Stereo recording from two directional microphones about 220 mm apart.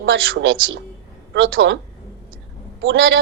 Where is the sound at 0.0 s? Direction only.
60° right (ahead or behind).